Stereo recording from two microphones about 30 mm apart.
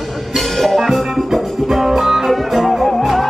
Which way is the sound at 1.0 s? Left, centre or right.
Centre.